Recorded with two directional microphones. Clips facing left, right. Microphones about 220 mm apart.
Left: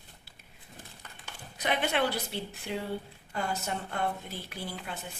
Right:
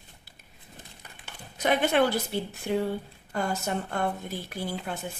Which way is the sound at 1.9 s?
50° right (ahead or behind).